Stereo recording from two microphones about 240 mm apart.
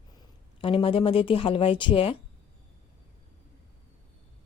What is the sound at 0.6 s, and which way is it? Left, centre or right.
Speech, left.